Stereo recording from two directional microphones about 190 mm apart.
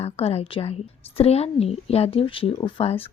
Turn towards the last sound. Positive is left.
turn(degrees=30)  # may be behind; listen again after turning